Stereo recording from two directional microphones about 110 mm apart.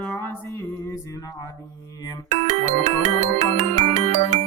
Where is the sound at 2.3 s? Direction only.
85° right.